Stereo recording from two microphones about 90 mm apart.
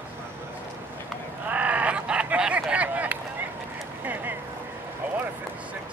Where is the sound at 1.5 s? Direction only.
15° right (ahead or behind).